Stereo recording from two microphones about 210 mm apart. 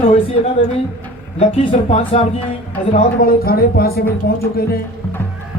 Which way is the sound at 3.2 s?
45° left (ahead or behind).